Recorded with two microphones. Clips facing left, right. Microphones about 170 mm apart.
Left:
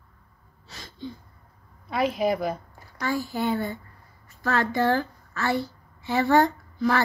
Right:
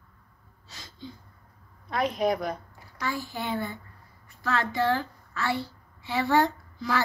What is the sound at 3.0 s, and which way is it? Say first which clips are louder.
A child's voice: left 5 dB; 45° left (ahead or behind).